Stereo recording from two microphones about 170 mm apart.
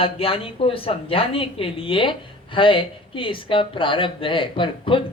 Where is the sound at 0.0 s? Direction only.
35° left (ahead or behind).